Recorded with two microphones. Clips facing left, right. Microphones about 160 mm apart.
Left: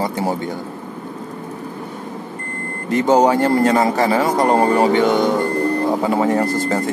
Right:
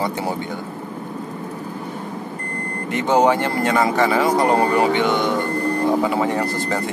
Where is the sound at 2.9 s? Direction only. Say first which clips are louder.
Left 3 dB; 40° left (ahead or behind).